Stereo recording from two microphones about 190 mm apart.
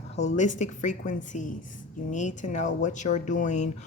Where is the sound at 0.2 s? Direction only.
40° left (ahead or behind).